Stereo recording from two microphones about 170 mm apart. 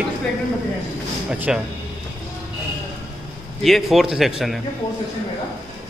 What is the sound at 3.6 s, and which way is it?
Speech, centre (ahead or behind).